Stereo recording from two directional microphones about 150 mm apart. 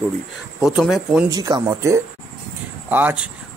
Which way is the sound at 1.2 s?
25° right (ahead or behind).